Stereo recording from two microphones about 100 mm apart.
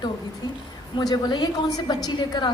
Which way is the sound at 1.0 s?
45° left (ahead or behind).